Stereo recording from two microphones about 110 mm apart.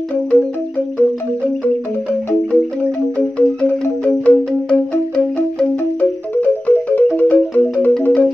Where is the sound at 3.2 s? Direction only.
15° left (ahead or behind).